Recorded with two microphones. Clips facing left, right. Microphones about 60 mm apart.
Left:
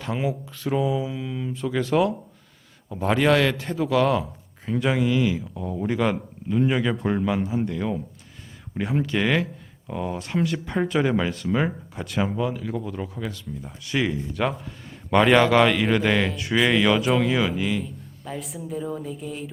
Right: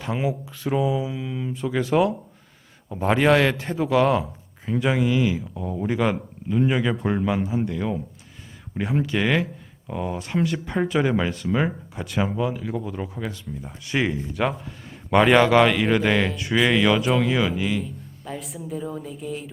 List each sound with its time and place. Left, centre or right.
0.0 s speech: centre
2.9 s a man's voice: right
4.6 s a man's voice: centre
13.8 s a man's voice: right
14.4 s a man's voice: centre